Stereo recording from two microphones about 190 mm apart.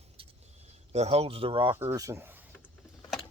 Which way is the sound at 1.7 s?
15° right (ahead or behind).